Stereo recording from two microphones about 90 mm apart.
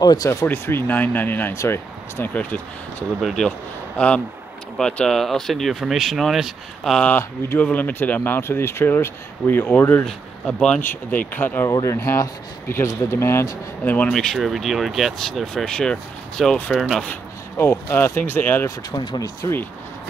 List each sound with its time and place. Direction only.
0.0 s speech: 45° left (ahead or behind)
0.5 s speech: 25° left (ahead or behind)
2.3 s speech: 15° left (ahead or behind)
3.2 s speech: 5° right (ahead or behind)
4.0 s speech: 15° left (ahead or behind)
7.1 s speech: 20° left (ahead or behind)
10.0 s speech: 10° left (ahead or behind)
11.8 s speech: 35° left (ahead or behind)
13.9 s speech: 5° left (ahead or behind)
17.0 s speech: 20° left (ahead or behind)
18.9 s speech: 45° left (ahead or behind)